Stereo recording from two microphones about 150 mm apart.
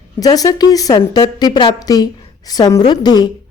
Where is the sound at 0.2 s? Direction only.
25° left (ahead or behind).